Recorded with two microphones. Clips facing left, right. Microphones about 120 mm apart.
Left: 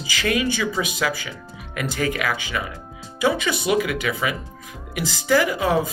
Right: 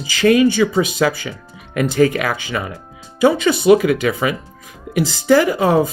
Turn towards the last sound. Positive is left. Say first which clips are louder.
# right 6 dB
turn(degrees=-35)  # may be behind; listen again after turning